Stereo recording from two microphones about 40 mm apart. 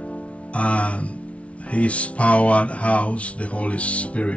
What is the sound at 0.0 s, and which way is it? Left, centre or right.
Speech, left.